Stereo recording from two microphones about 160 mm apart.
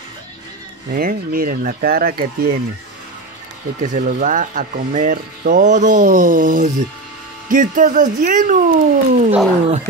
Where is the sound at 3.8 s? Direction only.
50° right (ahead or behind).